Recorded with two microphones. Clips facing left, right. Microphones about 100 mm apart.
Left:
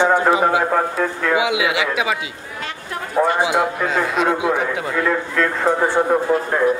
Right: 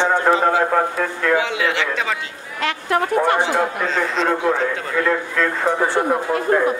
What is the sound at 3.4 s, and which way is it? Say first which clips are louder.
A man's voice: left 1 dB; 10° left (ahead or behind).